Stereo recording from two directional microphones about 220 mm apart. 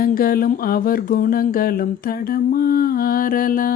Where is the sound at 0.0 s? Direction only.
40° left (ahead or behind).